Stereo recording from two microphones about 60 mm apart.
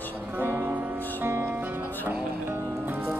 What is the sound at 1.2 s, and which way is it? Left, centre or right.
Music, right.